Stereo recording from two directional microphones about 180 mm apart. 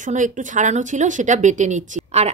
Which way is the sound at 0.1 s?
45° right (ahead or behind).